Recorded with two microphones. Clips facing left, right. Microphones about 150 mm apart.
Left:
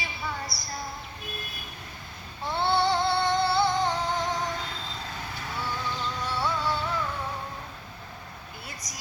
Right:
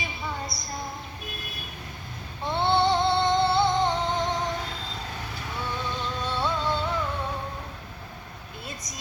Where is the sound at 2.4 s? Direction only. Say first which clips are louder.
Right 2 dB; 20° right (ahead or behind).